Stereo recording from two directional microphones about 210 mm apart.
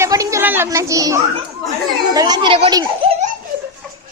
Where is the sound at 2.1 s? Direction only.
20° right (ahead or behind).